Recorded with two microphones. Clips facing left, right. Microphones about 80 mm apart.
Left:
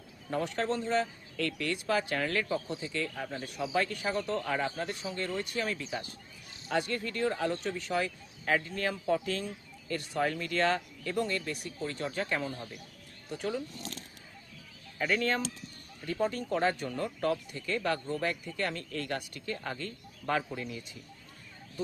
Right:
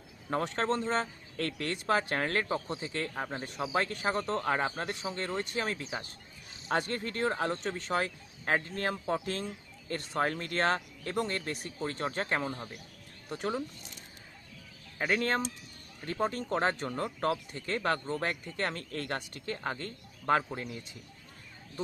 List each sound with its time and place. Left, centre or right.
0.3 s speech: right
16.0 s speech: right